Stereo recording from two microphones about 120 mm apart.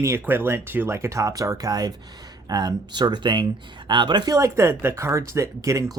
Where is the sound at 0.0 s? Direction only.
20° right (ahead or behind).